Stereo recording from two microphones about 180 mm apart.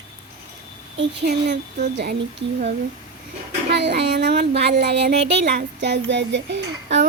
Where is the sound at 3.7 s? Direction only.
70° right (ahead or behind).